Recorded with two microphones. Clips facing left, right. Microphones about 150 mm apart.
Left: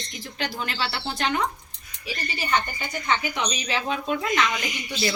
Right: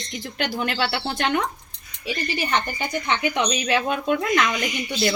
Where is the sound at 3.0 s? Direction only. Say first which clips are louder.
Right 2 dB; 65° right (ahead or behind).